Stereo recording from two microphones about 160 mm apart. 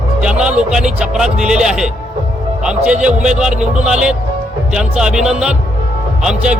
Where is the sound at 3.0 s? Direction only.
5° right (ahead or behind).